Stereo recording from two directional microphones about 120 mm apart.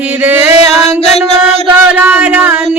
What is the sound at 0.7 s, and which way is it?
Music, 60° left (ahead or behind).